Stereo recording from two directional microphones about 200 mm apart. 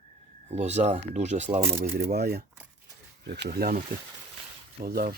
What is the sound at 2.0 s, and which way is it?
Speech, 50° right (ahead or behind).